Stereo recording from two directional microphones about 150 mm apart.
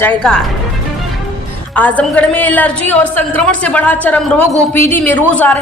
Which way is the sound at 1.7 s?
10° left (ahead or behind).